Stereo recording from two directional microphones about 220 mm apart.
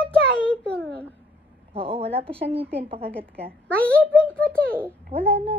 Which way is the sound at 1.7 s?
25° right (ahead or behind).